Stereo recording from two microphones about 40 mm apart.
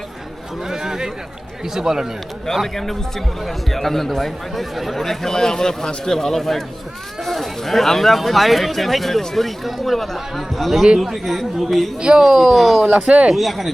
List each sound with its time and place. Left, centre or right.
0.7 s a sound: centre
1.7 s speech: centre
2.7 s speech: centre
11.9 s speech: centre
12.2 s speech: centre
12.9 s speech: right
13.3 s speech: centre